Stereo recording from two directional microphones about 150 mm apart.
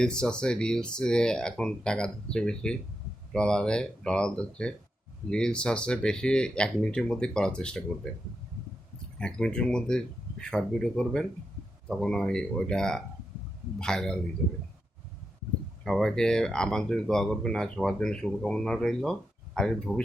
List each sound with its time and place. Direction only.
0.0 s speech: 5° left (ahead or behind)
9.1 s speech: 5° left (ahead or behind)
15.8 s speech: 5° left (ahead or behind)